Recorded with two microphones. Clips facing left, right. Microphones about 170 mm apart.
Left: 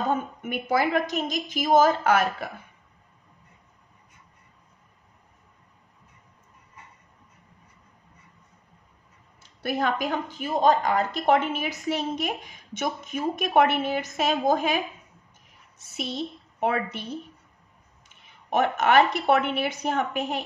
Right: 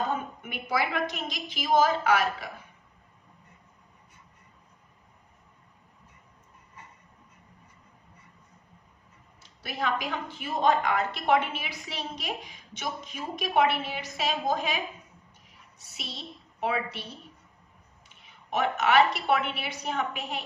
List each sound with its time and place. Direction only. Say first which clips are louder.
0.4 s a woman's voice: left 5 dB; 45° left (ahead or behind)
9.6 s a woman's voice: left 5 dB; 50° left (ahead or behind)
16.0 s a woman's voice: left 11 dB; 50° left (ahead or behind)
18.5 s a woman's voice: left 3 dB; 50° left (ahead or behind)